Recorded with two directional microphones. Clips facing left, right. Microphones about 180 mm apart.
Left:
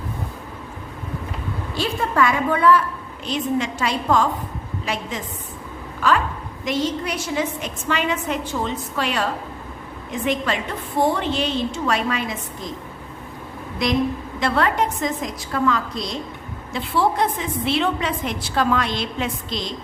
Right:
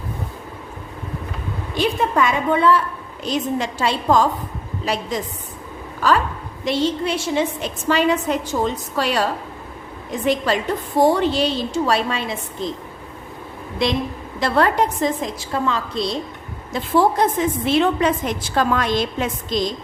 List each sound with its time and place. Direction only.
1.7 s a woman's voice: 20° right (ahead or behind)
3.2 s a woman's voice: 35° right (ahead or behind)
13.8 s a woman's voice: 30° right (ahead or behind)
14.3 s a woman's voice: 40° right (ahead or behind)
16.7 s a woman's voice: 40° right (ahead or behind)